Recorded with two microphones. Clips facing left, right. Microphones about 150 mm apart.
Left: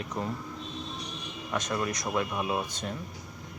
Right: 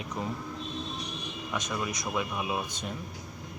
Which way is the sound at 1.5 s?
10° right (ahead or behind).